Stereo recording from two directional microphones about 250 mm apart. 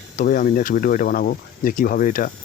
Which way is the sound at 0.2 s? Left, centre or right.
Left.